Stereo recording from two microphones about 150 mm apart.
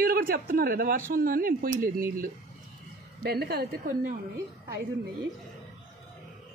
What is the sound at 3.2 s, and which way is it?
Speech, 90° right.